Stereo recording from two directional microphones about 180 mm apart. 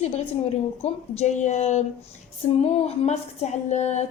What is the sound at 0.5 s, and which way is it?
A woman's voice, 35° left (ahead or behind).